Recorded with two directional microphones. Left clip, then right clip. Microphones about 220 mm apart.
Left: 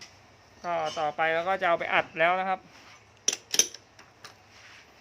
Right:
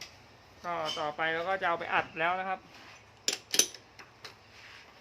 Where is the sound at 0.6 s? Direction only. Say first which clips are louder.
Left 5 dB; 50° left (ahead or behind).